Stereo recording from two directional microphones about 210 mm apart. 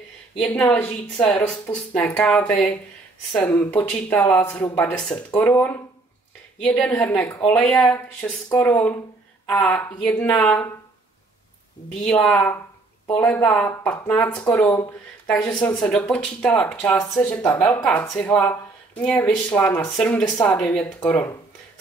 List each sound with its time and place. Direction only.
0.7 s speech: 5° left (ahead or behind)
11.9 s speech: 5° left (ahead or behind)
17.0 s speech: 15° left (ahead or behind)